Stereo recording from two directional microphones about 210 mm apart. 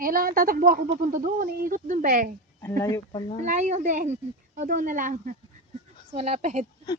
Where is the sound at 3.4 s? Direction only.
35° right (ahead or behind).